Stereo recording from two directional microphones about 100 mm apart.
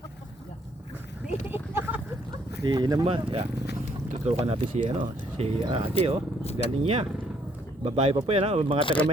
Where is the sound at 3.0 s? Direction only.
70° right (ahead or behind).